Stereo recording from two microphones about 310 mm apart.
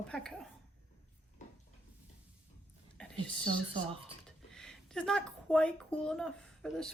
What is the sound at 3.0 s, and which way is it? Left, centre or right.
Whispering, centre.